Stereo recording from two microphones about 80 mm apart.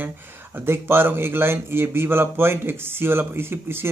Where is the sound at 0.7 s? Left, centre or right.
Right.